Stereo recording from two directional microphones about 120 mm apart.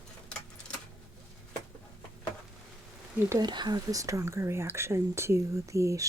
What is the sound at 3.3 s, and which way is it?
Speech, 35° right (ahead or behind).